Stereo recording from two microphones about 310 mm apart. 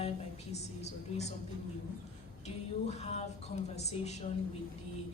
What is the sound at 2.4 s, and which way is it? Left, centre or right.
A woman's voice, left.